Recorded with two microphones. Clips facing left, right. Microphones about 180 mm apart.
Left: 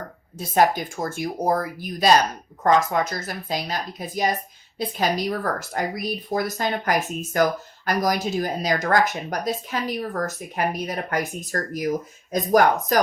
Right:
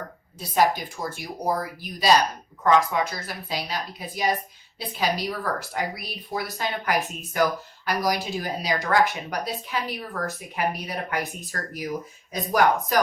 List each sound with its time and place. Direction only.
0.3 s speech: 50° left (ahead or behind)